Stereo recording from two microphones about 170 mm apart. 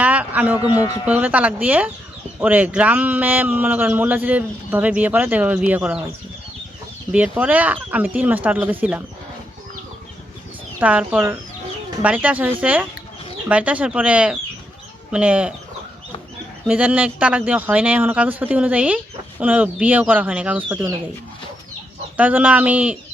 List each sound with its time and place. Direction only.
0.0 s a sound: 10° right (ahead or behind)
0.7 s speech: 20° left (ahead or behind)
1.0 s a man's voice: 10° right (ahead or behind)
7.1 s a man's voice: 10° right (ahead or behind)
10.8 s a man's voice: 10° right (ahead or behind)
16.6 s a man's voice: 10° right (ahead or behind)
22.2 s a man's voice: 10° right (ahead or behind)